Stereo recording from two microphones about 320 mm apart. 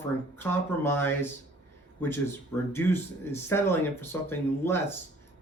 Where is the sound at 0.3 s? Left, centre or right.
Centre.